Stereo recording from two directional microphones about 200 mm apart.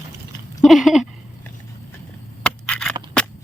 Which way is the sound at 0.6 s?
Centre (ahead or behind).